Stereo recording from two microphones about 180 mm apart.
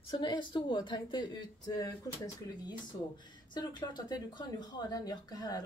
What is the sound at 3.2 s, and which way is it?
Speech, 25° left (ahead or behind).